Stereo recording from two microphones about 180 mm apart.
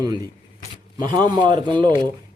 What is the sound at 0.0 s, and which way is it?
A man's voice, 20° right (ahead or behind).